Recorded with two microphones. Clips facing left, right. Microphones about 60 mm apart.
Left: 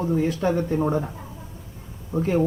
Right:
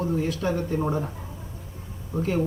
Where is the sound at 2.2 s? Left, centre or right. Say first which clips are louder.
Left 3 dB; left.